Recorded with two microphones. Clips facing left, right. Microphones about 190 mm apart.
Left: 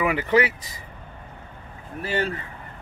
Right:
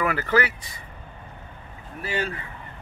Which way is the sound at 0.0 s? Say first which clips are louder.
Left 2 dB; 15° left (ahead or behind).